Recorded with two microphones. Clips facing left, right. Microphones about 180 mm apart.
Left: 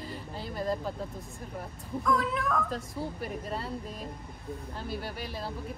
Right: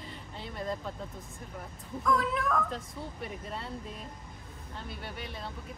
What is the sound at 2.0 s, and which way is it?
Speech, centre (ahead or behind).